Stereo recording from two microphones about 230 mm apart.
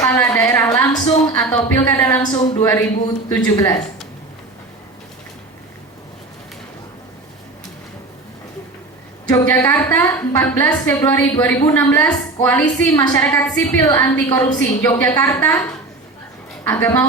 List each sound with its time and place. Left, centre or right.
0.0 s a sound: centre
3.2 s a woman's voice: centre
9.3 s a woman's voice: centre
16.6 s a woman's voice: centre